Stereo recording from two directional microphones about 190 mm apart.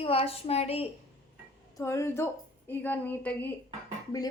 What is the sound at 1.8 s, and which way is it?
A woman's voice, 15° left (ahead or behind).